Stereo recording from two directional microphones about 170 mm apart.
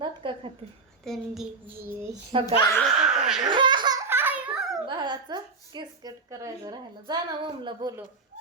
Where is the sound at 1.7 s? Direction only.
15° right (ahead or behind).